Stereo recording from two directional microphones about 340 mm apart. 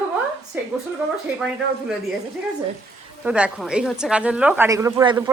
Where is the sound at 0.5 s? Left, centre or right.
Centre.